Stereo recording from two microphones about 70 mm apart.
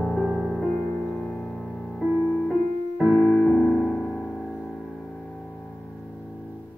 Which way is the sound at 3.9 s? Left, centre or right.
Left.